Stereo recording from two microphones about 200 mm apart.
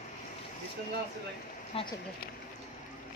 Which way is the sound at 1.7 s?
30° left (ahead or behind).